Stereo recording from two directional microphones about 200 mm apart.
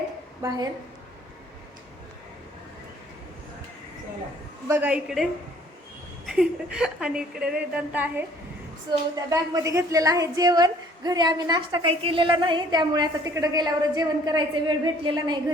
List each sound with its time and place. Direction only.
0.4 s a woman's voice: 20° right (ahead or behind)
4.7 s a woman's voice: 5° right (ahead or behind); by 15.4 s 20° right (ahead or behind)